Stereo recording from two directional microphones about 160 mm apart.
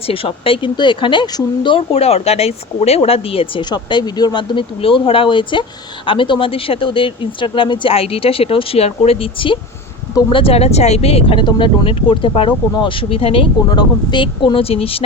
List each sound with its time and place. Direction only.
0.1 s speech: 35° left (ahead or behind)